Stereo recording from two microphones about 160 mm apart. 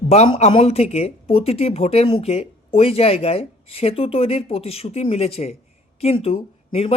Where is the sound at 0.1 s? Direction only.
40° left (ahead or behind).